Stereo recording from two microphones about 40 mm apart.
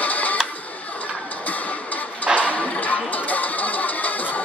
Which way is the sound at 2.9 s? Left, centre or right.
Left.